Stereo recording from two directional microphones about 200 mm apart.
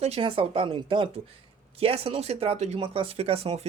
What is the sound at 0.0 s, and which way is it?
Speech, 30° right (ahead or behind).